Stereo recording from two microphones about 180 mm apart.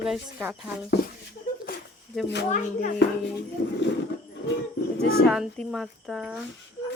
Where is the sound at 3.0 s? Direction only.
75° left (ahead or behind).